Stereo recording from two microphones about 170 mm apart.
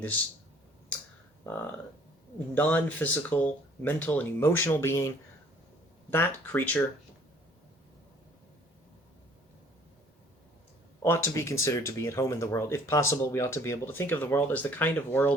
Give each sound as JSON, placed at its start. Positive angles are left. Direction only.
{"t": 2.6, "sound": "speech", "side_deg": 10}
{"t": 11.0, "sound": "speech", "side_deg": 15}